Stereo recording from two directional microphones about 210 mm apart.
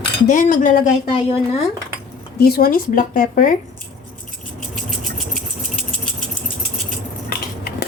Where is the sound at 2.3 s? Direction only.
45° left (ahead or behind).